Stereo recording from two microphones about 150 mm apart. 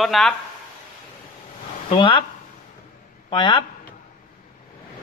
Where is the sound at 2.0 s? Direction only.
35° left (ahead or behind).